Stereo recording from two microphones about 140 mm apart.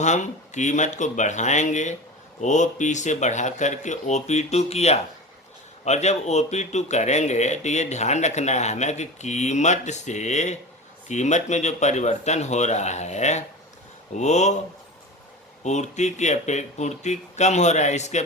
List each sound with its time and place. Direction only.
0.0 s speech: 60° left (ahead or behind)
15.6 s speech: 55° left (ahead or behind)